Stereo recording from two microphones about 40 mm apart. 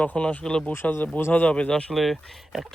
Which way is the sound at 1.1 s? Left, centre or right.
Left.